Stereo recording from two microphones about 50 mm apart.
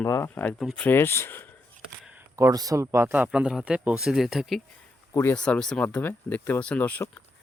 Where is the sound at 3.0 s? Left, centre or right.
Right.